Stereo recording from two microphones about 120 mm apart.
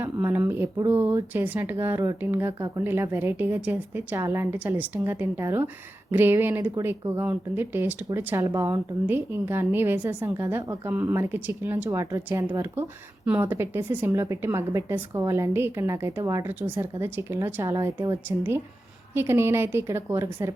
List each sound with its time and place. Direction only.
0.0 s a woman's voice: 20° right (ahead or behind)
11.9 s a woman's voice: 25° right (ahead or behind)